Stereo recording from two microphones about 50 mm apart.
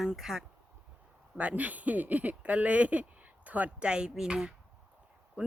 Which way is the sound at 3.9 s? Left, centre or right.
Centre.